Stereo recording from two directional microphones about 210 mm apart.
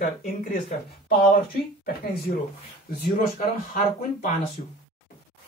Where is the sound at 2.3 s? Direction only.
60° left (ahead or behind).